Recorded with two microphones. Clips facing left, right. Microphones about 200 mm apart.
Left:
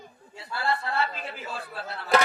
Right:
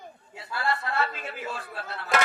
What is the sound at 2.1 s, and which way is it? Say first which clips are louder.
Speech: left 3 dB; 35° left (ahead or behind).